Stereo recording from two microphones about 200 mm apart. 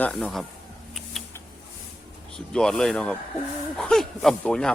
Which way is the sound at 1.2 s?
Centre (ahead or behind).